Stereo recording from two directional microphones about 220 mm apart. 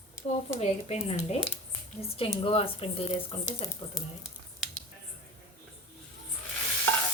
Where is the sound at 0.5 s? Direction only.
30° left (ahead or behind).